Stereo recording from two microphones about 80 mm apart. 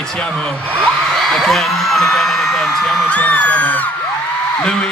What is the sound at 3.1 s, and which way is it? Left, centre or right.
A man's voice, centre.